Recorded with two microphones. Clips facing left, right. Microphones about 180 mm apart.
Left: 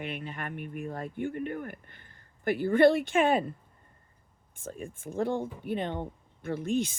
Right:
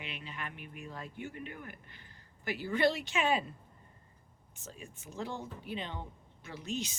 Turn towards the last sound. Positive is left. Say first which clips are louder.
# left 10 dB
turn(degrees=55)  # may be behind; listen again after turning